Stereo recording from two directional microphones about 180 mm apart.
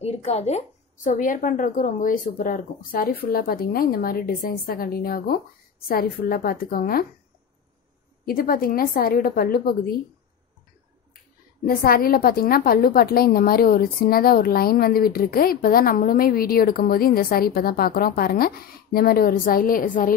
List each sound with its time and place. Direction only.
0.0 s a woman's voice: 35° left (ahead or behind); by 7.1 s 55° left (ahead or behind)
8.3 s speech: 55° left (ahead or behind)
11.6 s a woman's voice: 55° left (ahead or behind)